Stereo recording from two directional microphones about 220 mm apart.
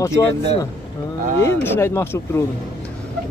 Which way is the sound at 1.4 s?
10° left (ahead or behind).